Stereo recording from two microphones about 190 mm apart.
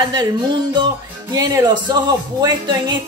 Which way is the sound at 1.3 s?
20° right (ahead or behind).